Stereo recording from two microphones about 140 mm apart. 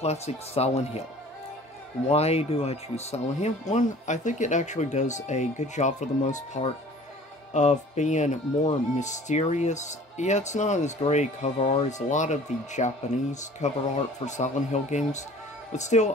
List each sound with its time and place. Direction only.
0.0 s speech: 50° left (ahead or behind)
2.0 s speech: 45° left (ahead or behind)